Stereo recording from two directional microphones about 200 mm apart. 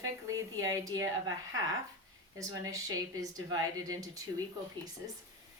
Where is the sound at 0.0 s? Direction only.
15° right (ahead or behind).